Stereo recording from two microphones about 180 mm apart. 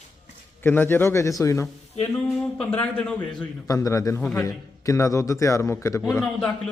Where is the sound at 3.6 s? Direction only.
15° left (ahead or behind).